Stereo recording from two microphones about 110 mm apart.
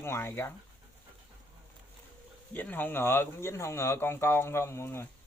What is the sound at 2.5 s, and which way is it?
Speech, 15° left (ahead or behind).